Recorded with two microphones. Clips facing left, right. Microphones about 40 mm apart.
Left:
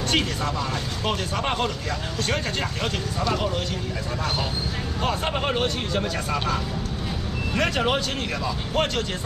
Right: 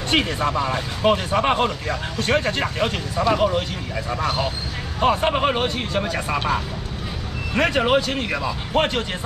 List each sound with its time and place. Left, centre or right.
0.1 s speech: right